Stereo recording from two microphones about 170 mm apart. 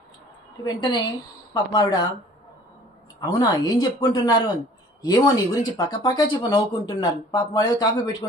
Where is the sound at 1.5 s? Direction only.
25° left (ahead or behind).